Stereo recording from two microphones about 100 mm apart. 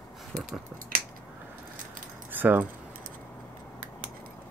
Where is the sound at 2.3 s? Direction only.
20° right (ahead or behind).